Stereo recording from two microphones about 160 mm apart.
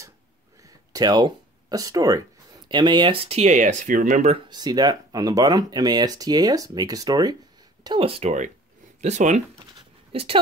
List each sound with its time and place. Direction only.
0.6 s a sound: 20° right (ahead or behind)
2.7 s speech: 30° right (ahead or behind); by 4.4 s 50° right (ahead or behind)
4.5 s speech: 25° right (ahead or behind); by 9.4 s 45° right (ahead or behind)
10.1 s speech: 35° right (ahead or behind)